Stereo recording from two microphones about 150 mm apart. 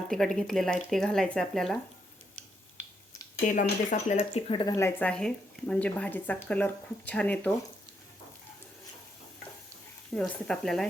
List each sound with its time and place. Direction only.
0.1 s speech: 5° left (ahead or behind)
3.2 s speech: 60° left (ahead or behind)
4.2 s speech: 40° left (ahead or behind)
4.8 s a woman's voice: 15° left (ahead or behind)
10.2 s speech: 5° left (ahead or behind)